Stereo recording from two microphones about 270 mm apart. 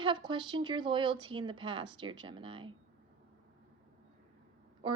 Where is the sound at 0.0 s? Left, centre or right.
Centre.